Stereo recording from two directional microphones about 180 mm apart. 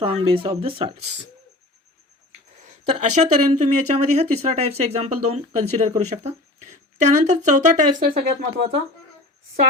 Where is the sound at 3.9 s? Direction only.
35° right (ahead or behind).